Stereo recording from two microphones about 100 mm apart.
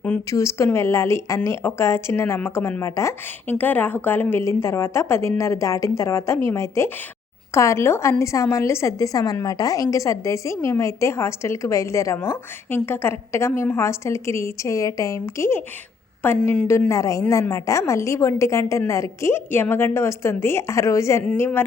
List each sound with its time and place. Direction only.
0.3 s a woman's voice: 30° left (ahead or behind)